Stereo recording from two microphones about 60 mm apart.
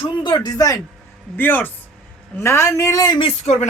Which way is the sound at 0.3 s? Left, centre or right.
Left.